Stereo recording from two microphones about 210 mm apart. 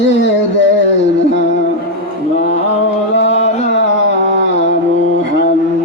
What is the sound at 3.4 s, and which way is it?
Music, 30° left (ahead or behind).